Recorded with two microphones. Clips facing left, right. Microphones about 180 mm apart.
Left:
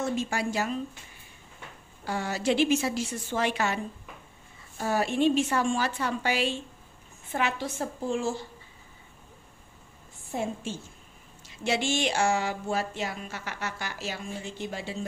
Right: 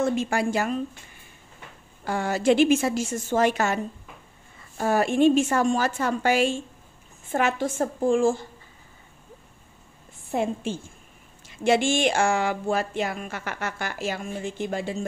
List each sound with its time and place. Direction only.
0.0 s speech: 55° right (ahead or behind)
2.0 s speech: 50° right (ahead or behind)
10.3 s a woman's voice: 60° right (ahead or behind)